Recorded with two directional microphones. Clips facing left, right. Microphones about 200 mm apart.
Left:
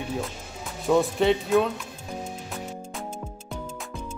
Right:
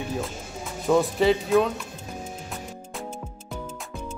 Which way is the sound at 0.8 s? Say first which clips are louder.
Right 1 dB; centre (ahead or behind).